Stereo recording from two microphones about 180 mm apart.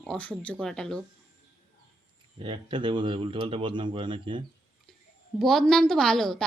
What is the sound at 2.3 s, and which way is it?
Speech, 30° right (ahead or behind).